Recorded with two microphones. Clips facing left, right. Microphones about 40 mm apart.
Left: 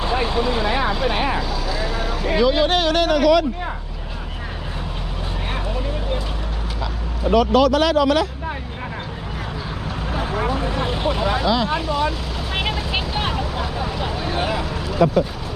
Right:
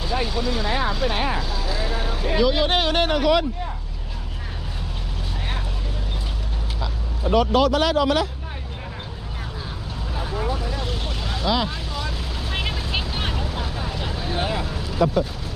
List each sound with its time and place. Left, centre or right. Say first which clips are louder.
0.0 s vehicle: left 4 dB; left; by 1.5 s centre
2.3 s speech: left 3 dB; centre
2.7 s speech: left 2 dB; centre
7.3 s speech: left 3 dB; left
10.1 s vehicle: left 4 dB; left
10.8 s speech: left 9 dB; left
11.4 s speech: even; centre
11.9 s speech: left 9 dB; left
12.7 s vehicle: left 4 dB; centre
15.0 s speech: left 3 dB; left